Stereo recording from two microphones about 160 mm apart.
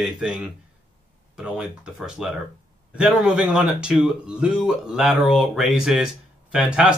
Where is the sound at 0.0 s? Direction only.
5° right (ahead or behind).